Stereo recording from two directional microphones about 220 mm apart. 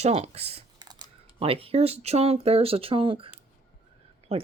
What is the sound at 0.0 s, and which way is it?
Speech, 30° right (ahead or behind).